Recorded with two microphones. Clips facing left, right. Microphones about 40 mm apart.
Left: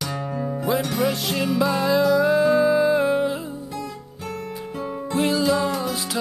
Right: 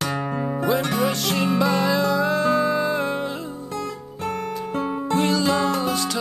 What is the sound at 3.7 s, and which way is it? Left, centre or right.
Guitar, right.